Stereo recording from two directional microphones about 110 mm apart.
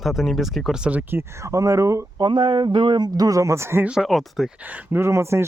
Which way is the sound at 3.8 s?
5° right (ahead or behind).